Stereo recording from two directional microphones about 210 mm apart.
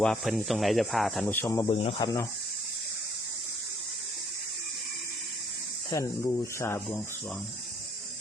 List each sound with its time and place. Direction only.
0.0 s speech: centre (ahead or behind)
1.6 s speech: 25° left (ahead or behind)
5.9 s speech: 15° left (ahead or behind)